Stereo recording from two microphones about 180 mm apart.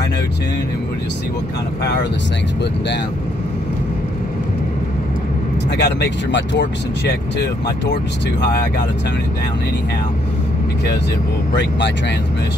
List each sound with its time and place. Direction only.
5.8 s speech: 75° left (ahead or behind)